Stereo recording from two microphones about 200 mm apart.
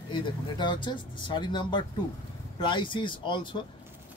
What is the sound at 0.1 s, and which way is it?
Speech, 25° left (ahead or behind).